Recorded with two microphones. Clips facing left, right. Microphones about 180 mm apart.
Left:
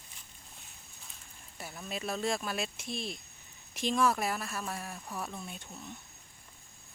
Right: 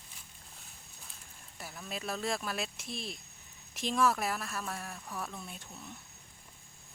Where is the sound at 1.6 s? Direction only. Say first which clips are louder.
Left 2 dB; centre (ahead or behind).